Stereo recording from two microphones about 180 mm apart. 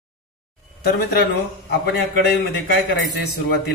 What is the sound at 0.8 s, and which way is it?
Speech, 65° left (ahead or behind).